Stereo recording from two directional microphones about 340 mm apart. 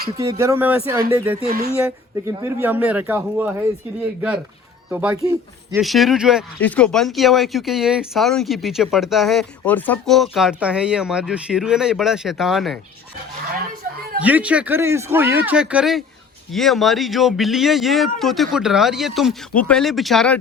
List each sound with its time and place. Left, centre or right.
0.2 s speech: centre
1.5 s speech: right
1.8 s speech: centre
4.9 s speech: centre
14.2 s speech: centre